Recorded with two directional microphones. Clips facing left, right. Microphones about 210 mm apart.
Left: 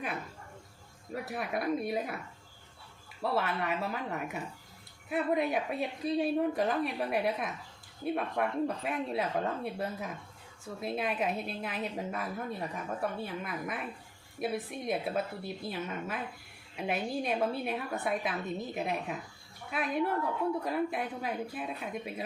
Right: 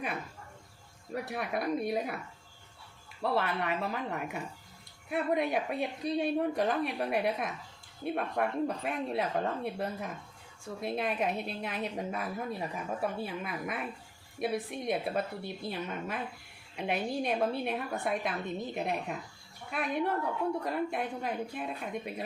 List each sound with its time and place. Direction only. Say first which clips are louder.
1.1 s a woman's voice: right 1 dB; centre (ahead or behind)
3.2 s a woman's voice: right 1 dB; centre (ahead or behind)